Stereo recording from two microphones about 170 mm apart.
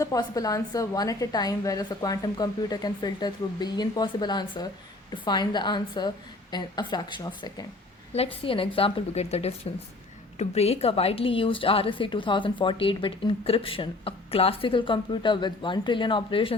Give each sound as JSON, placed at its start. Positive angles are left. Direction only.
{"t": 0.0, "sound": "a woman's voice", "side_deg": 20}